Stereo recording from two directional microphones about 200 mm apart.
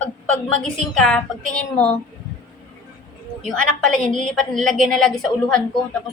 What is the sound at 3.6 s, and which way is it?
A woman's voice, 5° left (ahead or behind).